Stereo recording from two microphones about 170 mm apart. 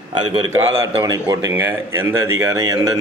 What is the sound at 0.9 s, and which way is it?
Speech, 20° right (ahead or behind).